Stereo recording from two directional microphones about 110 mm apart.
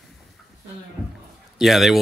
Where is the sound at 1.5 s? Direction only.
Centre (ahead or behind).